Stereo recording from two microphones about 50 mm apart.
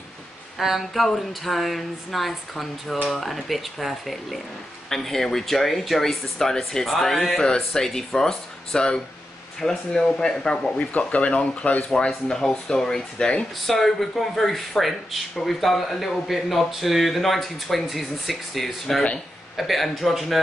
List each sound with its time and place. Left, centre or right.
0.6 s a man's voice: centre; by 11.8 s left
12.3 s a man's voice: centre